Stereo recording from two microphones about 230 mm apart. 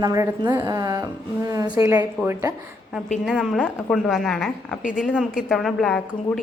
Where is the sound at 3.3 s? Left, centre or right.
Centre.